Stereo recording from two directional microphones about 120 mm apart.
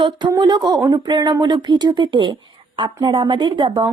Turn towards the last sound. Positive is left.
turn(degrees=-40)  # may be behind; listen again after turning